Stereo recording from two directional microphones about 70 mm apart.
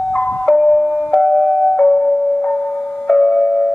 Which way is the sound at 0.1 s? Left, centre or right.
Centre.